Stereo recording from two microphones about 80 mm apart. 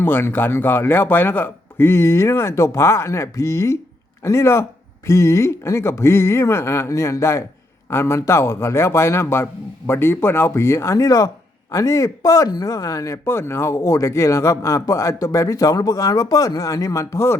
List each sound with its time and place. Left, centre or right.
0.0 s speech: left